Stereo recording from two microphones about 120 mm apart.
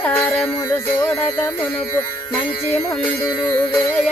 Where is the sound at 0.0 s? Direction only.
15° left (ahead or behind).